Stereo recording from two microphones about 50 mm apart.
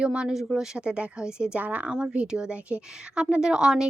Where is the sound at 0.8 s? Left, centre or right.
Right.